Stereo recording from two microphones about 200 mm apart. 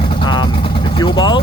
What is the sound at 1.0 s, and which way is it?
Speech, 20° left (ahead or behind).